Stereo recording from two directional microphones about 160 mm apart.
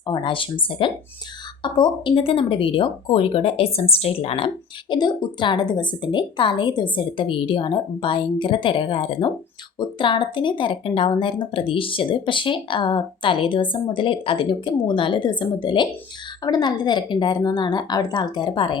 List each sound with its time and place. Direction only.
0.0 s speech: 30° left (ahead or behind)